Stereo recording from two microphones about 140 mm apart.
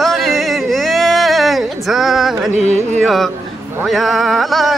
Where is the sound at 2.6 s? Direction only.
55° right (ahead or behind).